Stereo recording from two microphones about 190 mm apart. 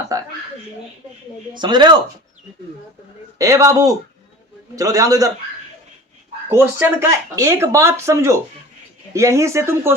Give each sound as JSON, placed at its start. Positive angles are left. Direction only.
{"t": 0.1, "sound": "a sound", "side_deg": -15}
{"t": 1.5, "sound": "speech", "side_deg": -25}
{"t": 3.3, "sound": "speech", "side_deg": -20}
{"t": 6.5, "sound": "speech", "side_deg": -10}